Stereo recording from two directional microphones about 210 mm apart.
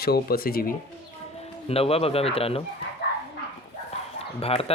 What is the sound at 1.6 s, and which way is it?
Speech, 30° left (ahead or behind).